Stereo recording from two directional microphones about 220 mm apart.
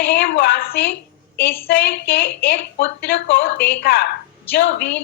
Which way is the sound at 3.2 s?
55° left (ahead or behind).